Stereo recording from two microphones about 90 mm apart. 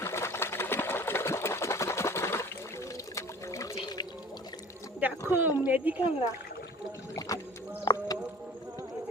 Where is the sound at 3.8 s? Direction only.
50° left (ahead or behind).